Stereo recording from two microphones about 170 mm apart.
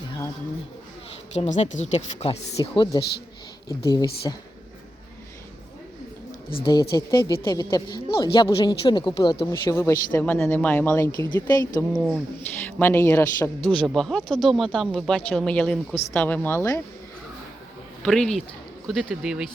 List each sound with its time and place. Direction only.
1.3 s speech: 40° left (ahead or behind)
2.6 s a woman's voice: 25° left (ahead or behind)
6.5 s a woman's voice: 30° left (ahead or behind)
11.9 s speech: centre (ahead or behind)
12.6 s speech: 10° left (ahead or behind)
13.8 s speech: 5° left (ahead or behind)
18.0 s speech: 5° left (ahead or behind)